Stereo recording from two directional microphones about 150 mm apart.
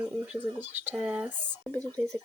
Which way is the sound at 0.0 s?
10° right (ahead or behind).